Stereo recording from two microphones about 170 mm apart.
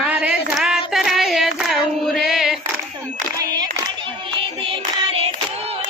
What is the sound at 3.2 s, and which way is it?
Crowd, 20° right (ahead or behind).